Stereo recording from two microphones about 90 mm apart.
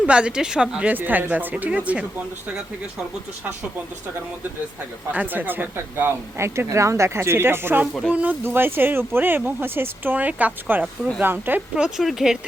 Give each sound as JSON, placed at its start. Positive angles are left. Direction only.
{"t": 0.0, "sound": "a woman's voice", "side_deg": -10}
{"t": 5.1, "sound": "a woman's voice", "side_deg": -20}
{"t": 11.8, "sound": "a woman's voice", "side_deg": -5}